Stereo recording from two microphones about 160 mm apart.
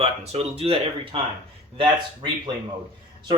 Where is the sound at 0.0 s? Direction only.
40° right (ahead or behind).